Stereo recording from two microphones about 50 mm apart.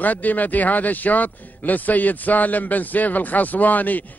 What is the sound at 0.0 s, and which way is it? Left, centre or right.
A man's voice, left.